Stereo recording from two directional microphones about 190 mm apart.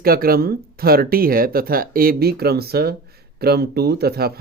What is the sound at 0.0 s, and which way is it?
Speech, 50° right (ahead or behind).